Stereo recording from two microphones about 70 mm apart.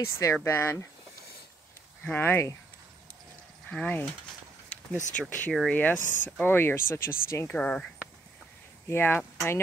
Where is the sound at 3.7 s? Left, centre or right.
Left.